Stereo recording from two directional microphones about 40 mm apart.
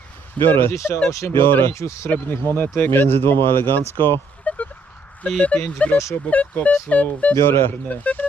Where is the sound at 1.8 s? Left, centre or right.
Left.